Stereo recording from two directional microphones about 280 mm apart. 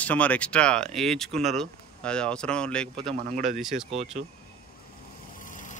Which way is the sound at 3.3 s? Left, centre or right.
Right.